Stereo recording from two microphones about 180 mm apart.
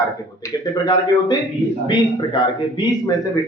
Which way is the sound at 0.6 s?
20° left (ahead or behind).